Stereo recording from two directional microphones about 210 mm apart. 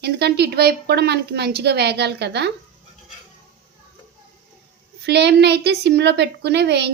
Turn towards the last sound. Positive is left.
turn(degrees=-50)  # may be behind; listen again after turning